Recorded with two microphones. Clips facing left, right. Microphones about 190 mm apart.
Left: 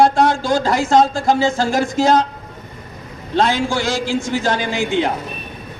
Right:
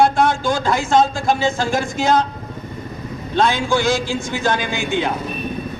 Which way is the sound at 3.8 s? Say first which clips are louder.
Right 1 dB; 80° left.